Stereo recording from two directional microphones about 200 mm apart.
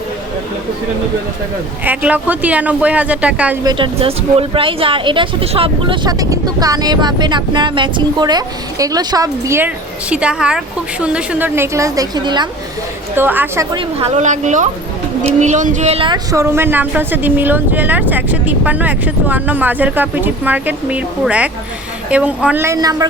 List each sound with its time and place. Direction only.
1.8 s a woman's voice: 10° right (ahead or behind)
3.6 s a woman's voice: 20° right (ahead or behind)
13.1 s a woman's voice: 10° right (ahead or behind)
13.7 s a woman's voice: 30° right (ahead or behind)